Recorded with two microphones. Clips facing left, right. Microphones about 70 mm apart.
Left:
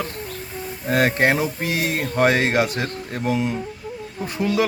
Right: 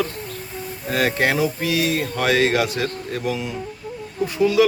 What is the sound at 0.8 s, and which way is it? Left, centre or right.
Speech, left.